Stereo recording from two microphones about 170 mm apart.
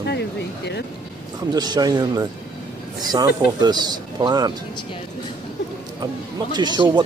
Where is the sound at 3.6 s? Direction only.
25° right (ahead or behind).